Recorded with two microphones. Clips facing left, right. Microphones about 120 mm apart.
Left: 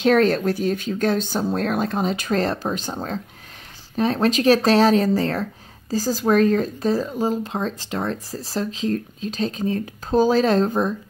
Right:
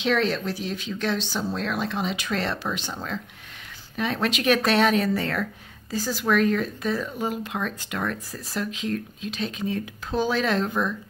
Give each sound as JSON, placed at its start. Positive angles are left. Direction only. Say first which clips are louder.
{"t": 0.0, "sound": "speech", "louder": "left 7 dB", "side_deg": 45}